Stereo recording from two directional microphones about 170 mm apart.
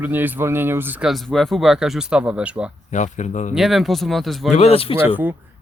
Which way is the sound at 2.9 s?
45° left (ahead or behind).